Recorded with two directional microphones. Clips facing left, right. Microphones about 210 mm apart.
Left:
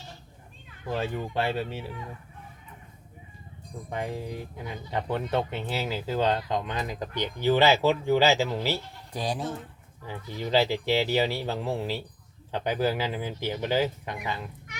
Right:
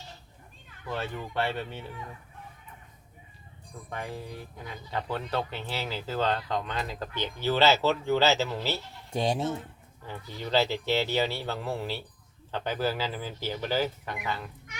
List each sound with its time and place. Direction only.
0.9 s speech: 25° left (ahead or behind)
3.8 s speech: 20° left (ahead or behind)
9.1 s speech: 25° right (ahead or behind)
10.1 s speech: 10° left (ahead or behind)